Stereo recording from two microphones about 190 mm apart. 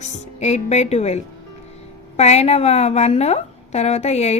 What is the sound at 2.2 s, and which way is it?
A woman's voice, 35° left (ahead or behind).